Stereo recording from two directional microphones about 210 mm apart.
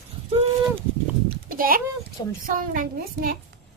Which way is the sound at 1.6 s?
45° right (ahead or behind).